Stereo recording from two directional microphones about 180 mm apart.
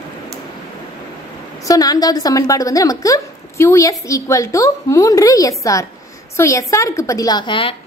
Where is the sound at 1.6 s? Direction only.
20° left (ahead or behind).